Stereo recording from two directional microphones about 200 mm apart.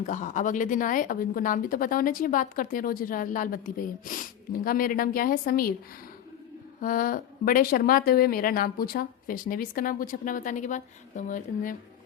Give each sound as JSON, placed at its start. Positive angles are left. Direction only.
{"t": 0.0, "sound": "speech", "side_deg": 40}
{"t": 6.8, "sound": "speech", "side_deg": 45}